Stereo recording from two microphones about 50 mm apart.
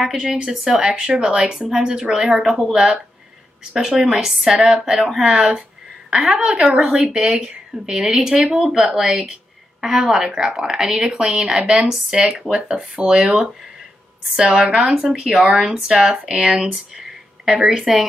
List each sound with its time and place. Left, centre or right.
0.2 s speech: centre
6.0 s speech: centre
11.7 s speech: centre
12.1 s speech: centre